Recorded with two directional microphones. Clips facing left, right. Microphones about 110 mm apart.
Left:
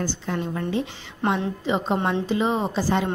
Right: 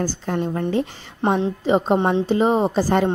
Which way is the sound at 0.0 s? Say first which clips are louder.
Right 4 dB; 40° right (ahead or behind).